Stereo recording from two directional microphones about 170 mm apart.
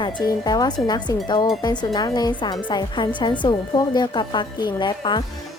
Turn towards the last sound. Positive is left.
turn(degrees=25)  # may be behind; listen again after turning